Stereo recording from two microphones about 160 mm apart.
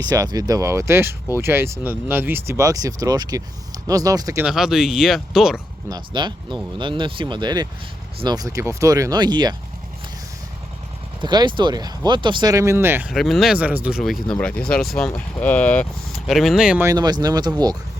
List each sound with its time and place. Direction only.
0.0 s speech: 20° right (ahead or behind)
4.4 s speech: 5° right (ahead or behind)
5.9 s speech: 30° right (ahead or behind)
11.2 s speech: 30° right (ahead or behind)
13.1 s speech: centre (ahead or behind)
16.8 s speech: 25° right (ahead or behind)